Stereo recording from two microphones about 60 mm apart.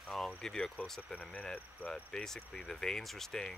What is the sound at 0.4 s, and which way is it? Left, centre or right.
Speech, centre.